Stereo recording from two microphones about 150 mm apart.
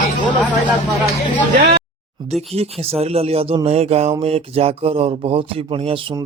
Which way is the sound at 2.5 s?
40° right (ahead or behind).